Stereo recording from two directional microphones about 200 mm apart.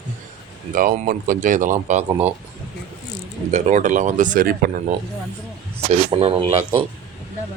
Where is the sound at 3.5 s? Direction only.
35° right (ahead or behind).